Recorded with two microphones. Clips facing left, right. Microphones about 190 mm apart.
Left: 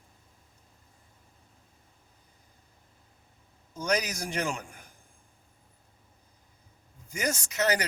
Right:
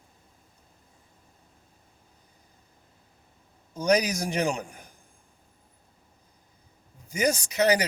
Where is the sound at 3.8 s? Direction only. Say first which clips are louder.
Right 6 dB; 15° right (ahead or behind).